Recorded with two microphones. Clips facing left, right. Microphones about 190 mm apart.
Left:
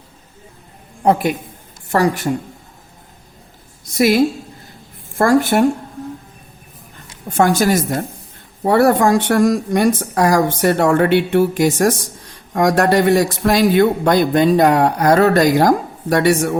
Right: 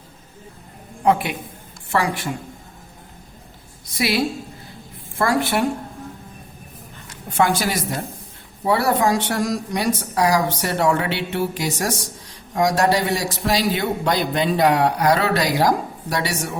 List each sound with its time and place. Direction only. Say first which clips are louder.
1.0 s a man's voice: left 4 dB; 40° left (ahead or behind)
3.9 s speech: left 8 dB; 45° left (ahead or behind)
7.3 s speech: left 6 dB; 45° left (ahead or behind)